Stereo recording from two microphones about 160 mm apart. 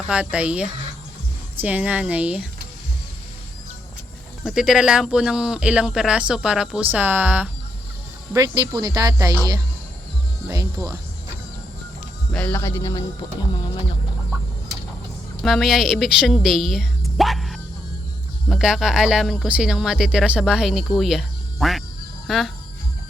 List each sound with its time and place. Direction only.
0.1 s speech: 5° right (ahead or behind)
4.4 s speech: 5° right (ahead or behind)
8.3 s speech: 25° right (ahead or behind)
12.3 s a man's voice: 10° left (ahead or behind)
15.4 s speech: centre (ahead or behind)